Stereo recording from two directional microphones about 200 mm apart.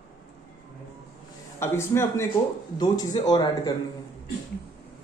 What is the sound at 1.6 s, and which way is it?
A man's voice, 10° left (ahead or behind).